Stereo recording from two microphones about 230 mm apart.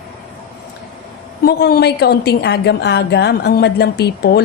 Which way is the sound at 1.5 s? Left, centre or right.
Left.